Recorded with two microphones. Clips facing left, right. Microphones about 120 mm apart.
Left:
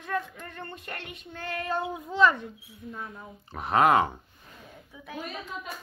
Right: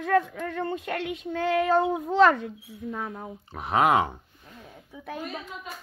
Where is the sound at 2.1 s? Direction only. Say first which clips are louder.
Right 3 dB; 85° right.